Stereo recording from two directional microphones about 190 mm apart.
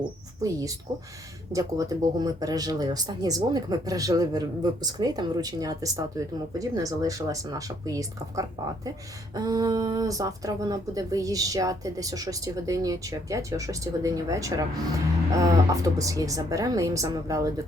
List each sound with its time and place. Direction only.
0.4 s speech: 20° right (ahead or behind)